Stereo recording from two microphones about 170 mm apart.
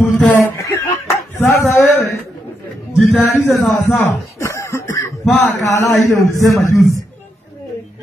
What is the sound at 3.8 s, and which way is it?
Chuckle, 15° left (ahead or behind).